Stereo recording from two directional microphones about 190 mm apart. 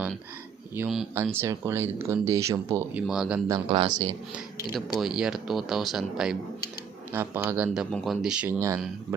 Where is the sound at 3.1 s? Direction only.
5° right (ahead or behind).